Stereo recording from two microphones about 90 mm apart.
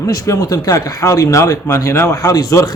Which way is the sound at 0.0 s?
40° left (ahead or behind).